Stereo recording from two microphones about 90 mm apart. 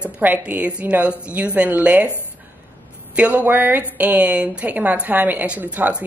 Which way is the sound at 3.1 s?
15° right (ahead or behind).